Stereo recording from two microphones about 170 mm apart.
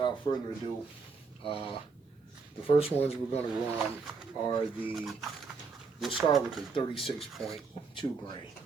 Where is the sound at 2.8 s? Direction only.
35° left (ahead or behind).